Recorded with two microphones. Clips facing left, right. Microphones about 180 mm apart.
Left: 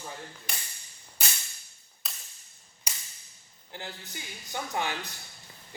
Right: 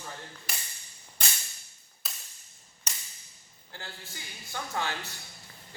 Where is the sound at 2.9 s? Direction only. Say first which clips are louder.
Even; 10° left (ahead or behind).